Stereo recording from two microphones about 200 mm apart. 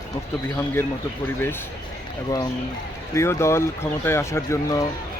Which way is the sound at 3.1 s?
15° left (ahead or behind).